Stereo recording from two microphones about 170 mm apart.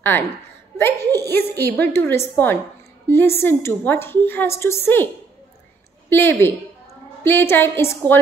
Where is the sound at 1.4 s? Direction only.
70° right (ahead or behind).